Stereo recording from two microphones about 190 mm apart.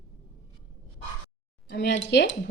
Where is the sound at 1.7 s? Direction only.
65° left (ahead or behind).